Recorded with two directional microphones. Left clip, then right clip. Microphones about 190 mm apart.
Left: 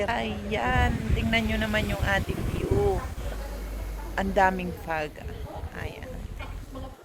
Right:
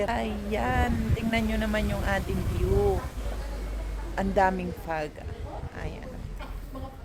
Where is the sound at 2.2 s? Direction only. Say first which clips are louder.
Left 1 dB; 50° right (ahead or behind).